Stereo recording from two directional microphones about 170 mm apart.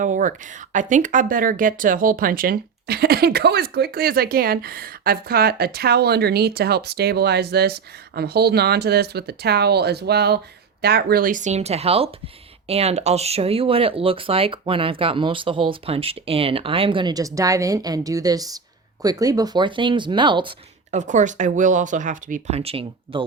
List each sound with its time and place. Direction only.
0.0 s speech: 50° right (ahead or behind); by 20.5 s 30° right (ahead or behind)
20.9 s speech: 45° right (ahead or behind)